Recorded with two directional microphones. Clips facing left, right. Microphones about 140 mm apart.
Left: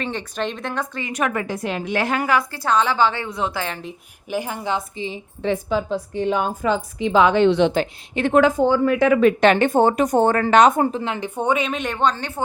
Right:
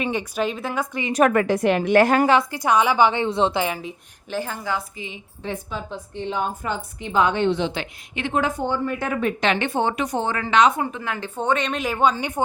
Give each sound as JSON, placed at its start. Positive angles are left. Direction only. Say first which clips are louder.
{"t": 0.0, "sound": "speech", "louder": "right 2 dB", "side_deg": -10}
{"t": 1.3, "sound": "a woman's voice", "louder": "right 6 dB", "side_deg": -65}
{"t": 2.2, "sound": "a woman's voice", "louder": "right 2 dB", "side_deg": -20}
{"t": 3.6, "sound": "speech", "louder": "right 3 dB", "side_deg": -10}
{"t": 4.3, "sound": "a woman's voice", "louder": "left 2 dB", "side_deg": 15}
{"t": 5.4, "sound": "a woman's voice", "louder": "left 9 dB", "side_deg": 90}
{"t": 7.7, "sound": "speech", "louder": "left 8 dB", "side_deg": 45}
{"t": 8.3, "sound": "a woman's voice", "louder": "left 8 dB", "side_deg": 90}
{"t": 9.4, "sound": "speech", "louder": "left 7 dB", "side_deg": 45}
{"t": 10.9, "sound": "speech", "louder": "left 4 dB", "side_deg": 20}